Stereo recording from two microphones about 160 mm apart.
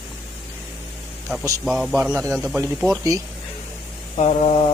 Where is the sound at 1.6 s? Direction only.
Centre (ahead or behind).